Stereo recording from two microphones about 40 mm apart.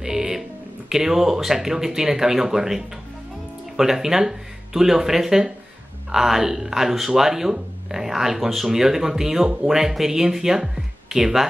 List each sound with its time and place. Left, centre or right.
0.0 s speech: centre